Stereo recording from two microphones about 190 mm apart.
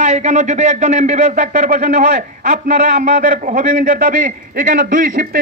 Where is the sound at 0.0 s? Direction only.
40° right (ahead or behind).